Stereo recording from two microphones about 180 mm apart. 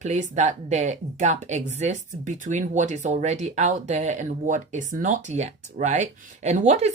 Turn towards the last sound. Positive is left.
turn(degrees=-40)  # may be behind; listen again after turning